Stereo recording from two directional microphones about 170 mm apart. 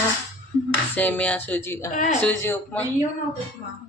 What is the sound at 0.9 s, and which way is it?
Speech, 10° left (ahead or behind).